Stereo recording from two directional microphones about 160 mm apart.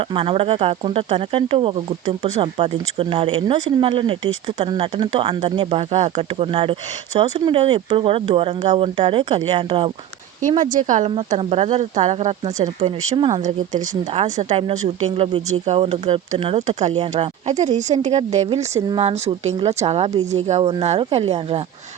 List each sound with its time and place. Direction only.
0.1 s speech: 35° right (ahead or behind)
10.6 s speech: 50° right (ahead or behind)
11.3 s speech: 40° right (ahead or behind)
13.1 s speech: 30° right (ahead or behind)